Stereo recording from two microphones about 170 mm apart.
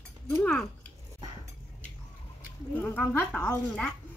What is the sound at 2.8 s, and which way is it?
Speech, 10° left (ahead or behind).